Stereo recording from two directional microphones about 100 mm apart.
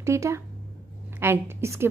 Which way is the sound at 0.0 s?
30° right (ahead or behind).